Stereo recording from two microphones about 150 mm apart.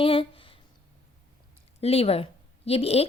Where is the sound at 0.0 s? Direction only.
40° left (ahead or behind).